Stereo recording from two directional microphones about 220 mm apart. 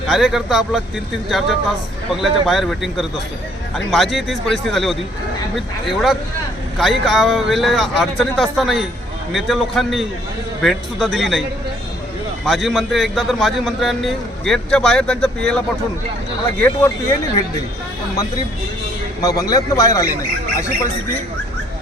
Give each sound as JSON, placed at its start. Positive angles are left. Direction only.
{"t": 0.1, "sound": "a man's voice", "side_deg": 0}
{"t": 12.5, "sound": "a man's voice", "side_deg": 0}
{"t": 16.6, "sound": "a man's voice", "side_deg": 10}
{"t": 19.2, "sound": "a man's voice", "side_deg": 15}